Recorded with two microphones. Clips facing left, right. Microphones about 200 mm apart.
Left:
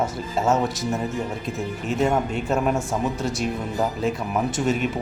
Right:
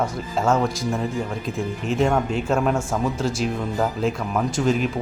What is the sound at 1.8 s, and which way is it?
Speech, centre (ahead or behind).